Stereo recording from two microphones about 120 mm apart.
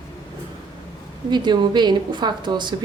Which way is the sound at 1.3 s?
40° right (ahead or behind).